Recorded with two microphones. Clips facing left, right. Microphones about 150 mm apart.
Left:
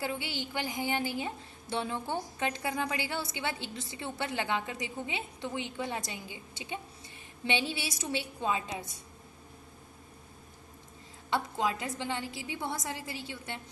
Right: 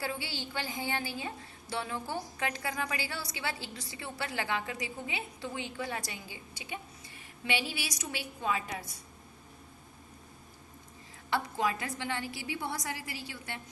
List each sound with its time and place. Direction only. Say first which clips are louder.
0.0 s a woman's voice: left 2 dB; 20° left (ahead or behind)
11.3 s a woman's voice: even; 20° left (ahead or behind)